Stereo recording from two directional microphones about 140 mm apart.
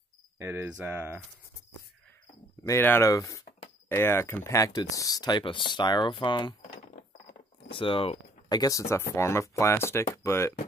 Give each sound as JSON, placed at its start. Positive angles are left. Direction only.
{"t": 0.4, "sound": "speech", "side_deg": -15}
{"t": 2.6, "sound": "speech", "side_deg": 15}
{"t": 7.7, "sound": "speech", "side_deg": 40}
{"t": 8.5, "sound": "speech", "side_deg": 25}